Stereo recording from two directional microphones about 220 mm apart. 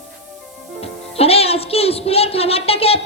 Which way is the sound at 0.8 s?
25° left (ahead or behind).